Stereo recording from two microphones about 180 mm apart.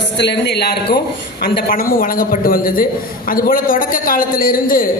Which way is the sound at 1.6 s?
50° left (ahead or behind).